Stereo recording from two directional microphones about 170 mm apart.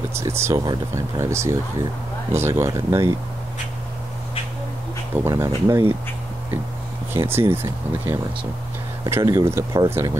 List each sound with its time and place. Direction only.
0.1 s speech: 15° right (ahead or behind)
5.2 s speech: 20° right (ahead or behind)
7.2 s speech: 15° right (ahead or behind)